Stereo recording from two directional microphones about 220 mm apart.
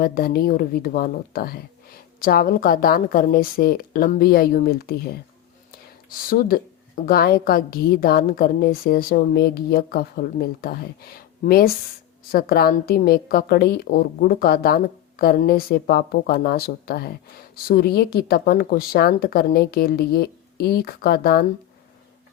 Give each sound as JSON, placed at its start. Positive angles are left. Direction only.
{"t": 0.0, "sound": "a woman's voice", "side_deg": 40}